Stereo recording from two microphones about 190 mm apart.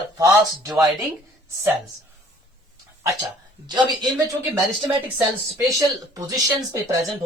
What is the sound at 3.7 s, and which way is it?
Speech, 20° right (ahead or behind).